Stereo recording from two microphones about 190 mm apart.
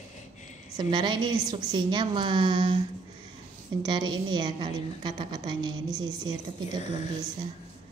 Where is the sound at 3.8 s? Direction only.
25° right (ahead or behind).